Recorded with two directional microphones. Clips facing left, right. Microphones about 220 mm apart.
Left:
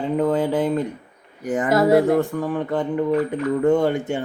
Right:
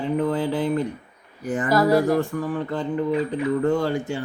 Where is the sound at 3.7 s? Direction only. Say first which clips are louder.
Left 4 dB; 20° left (ahead or behind).